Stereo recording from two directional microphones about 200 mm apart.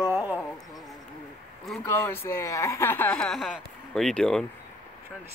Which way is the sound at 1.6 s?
10° left (ahead or behind).